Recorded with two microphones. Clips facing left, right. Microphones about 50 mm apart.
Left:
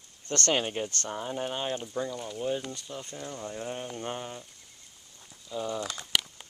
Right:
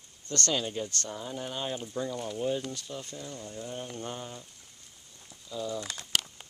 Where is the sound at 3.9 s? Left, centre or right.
Left.